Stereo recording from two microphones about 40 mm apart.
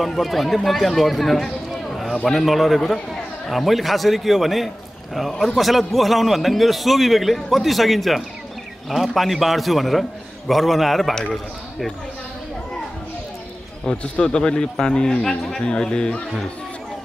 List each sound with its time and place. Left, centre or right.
0.0 s a man's voice: centre
14.0 s speech: left